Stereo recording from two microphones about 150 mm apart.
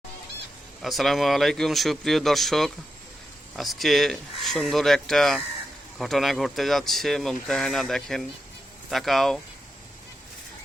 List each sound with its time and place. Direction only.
0.8 s speech: centre (ahead or behind)